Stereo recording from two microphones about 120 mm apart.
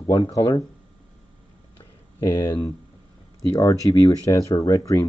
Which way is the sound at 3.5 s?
25° left (ahead or behind).